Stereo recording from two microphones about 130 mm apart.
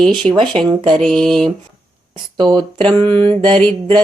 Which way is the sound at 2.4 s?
30° right (ahead or behind).